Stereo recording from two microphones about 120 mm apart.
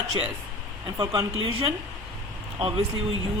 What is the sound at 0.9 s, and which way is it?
Speech, 30° right (ahead or behind).